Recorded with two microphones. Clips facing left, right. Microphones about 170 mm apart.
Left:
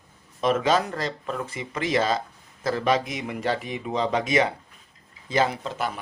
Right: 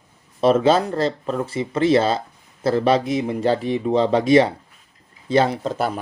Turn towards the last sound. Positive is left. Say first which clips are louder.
# right 7 dB
turn(degrees=-40)  # may be behind; listen again after turning